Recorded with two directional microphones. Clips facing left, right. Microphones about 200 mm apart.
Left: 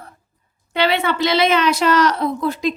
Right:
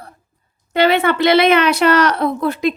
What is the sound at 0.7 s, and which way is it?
A woman's voice, 50° right (ahead or behind).